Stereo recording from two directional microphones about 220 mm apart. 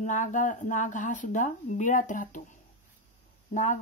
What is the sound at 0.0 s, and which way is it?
Speech, 35° left (ahead or behind).